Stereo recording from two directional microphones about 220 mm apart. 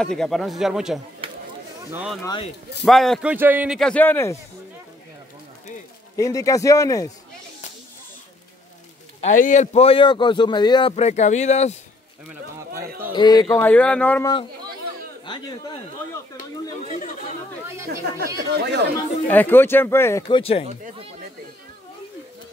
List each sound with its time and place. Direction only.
0.0 s speech: 5° left (ahead or behind)
1.2 s a sound: 25° right (ahead or behind)
1.9 s speech: 5° right (ahead or behind)
2.2 s speech: 20° left (ahead or behind)
2.8 s speech: centre (ahead or behind)
6.1 s speech: 15° left (ahead or behind)
9.2 s speech: 35° left (ahead or behind)
13.1 s speech: 20° left (ahead or behind)
15.2 s speech: 20° left (ahead or behind)
17.8 s speech: 50° right (ahead or behind)
19.2 s speech: 10° left (ahead or behind); by 20.6 s 25° left (ahead or behind)